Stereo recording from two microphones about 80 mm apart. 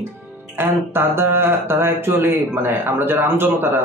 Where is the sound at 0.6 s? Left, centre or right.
Right.